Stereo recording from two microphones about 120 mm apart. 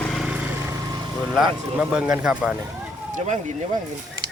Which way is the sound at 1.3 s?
5° right (ahead or behind).